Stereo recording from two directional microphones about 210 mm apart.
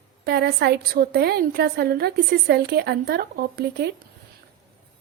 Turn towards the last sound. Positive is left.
turn(degrees=-50)  # may be behind; listen again after turning